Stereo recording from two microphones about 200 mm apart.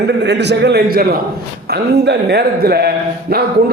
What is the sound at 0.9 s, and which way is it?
A man's voice, 50° right (ahead or behind).